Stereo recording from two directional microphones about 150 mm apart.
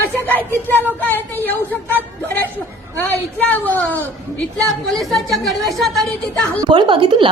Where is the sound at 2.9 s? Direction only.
10° left (ahead or behind).